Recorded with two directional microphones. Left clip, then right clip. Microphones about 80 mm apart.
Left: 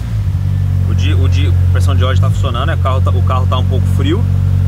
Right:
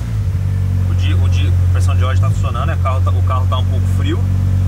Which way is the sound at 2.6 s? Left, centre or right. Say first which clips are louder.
Left 3 dB; centre.